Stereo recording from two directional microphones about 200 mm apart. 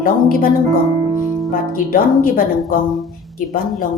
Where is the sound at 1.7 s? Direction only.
45° left (ahead or behind).